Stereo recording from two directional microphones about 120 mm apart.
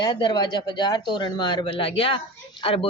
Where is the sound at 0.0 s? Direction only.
35° left (ahead or behind).